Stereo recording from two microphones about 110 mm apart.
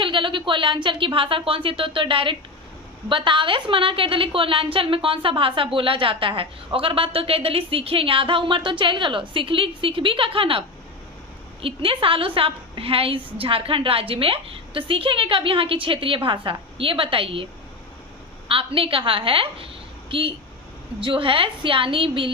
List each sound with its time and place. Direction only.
0.0 s a woman's voice: 50° right (ahead or behind)
11.6 s a woman's voice: 55° right (ahead or behind)
18.4 s a woman's voice: 55° right (ahead or behind)